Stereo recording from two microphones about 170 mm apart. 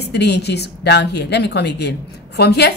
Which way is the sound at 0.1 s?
80° left.